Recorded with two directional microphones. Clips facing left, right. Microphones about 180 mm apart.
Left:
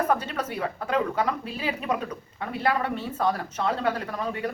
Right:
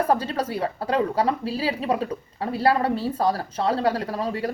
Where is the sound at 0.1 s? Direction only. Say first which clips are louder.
Right 3 dB; 30° right (ahead or behind).